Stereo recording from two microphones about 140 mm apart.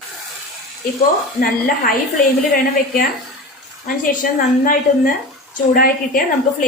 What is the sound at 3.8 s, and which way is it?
A woman's voice, 80° left.